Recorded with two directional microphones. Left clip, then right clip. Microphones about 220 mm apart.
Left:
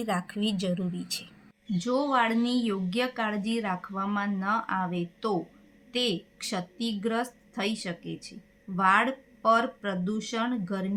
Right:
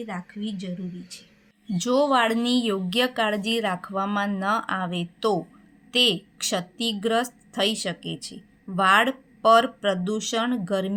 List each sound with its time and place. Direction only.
0.0 s speech: 30° left (ahead or behind)
1.8 s speech: 40° right (ahead or behind)